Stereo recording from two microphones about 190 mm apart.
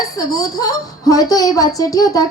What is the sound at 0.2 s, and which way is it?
A woman's voice, 20° left (ahead or behind).